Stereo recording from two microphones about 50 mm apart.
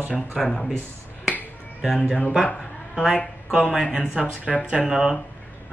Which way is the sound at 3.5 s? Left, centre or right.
Centre.